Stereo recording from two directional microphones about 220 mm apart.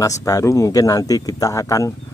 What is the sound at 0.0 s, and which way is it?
Speech, 15° left (ahead or behind).